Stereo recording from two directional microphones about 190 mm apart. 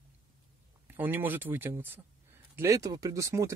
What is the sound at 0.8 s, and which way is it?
Speech, 10° right (ahead or behind).